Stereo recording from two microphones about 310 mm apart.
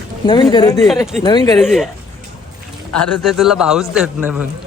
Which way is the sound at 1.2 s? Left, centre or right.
Centre.